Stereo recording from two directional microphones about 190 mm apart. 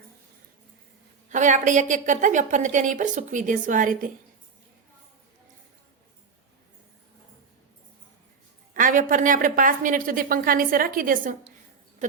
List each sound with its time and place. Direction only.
1.3 s a woman's voice: 40° right (ahead or behind)
8.7 s a woman's voice: 45° right (ahead or behind)